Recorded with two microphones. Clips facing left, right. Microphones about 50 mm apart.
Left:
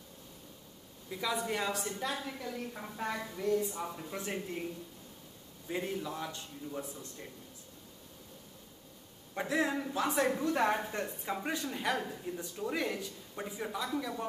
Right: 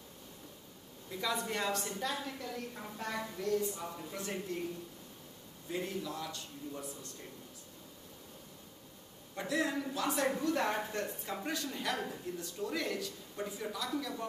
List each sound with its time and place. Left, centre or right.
1.1 s a woman's voice: centre
5.7 s speech: left
9.3 s a woman's voice: left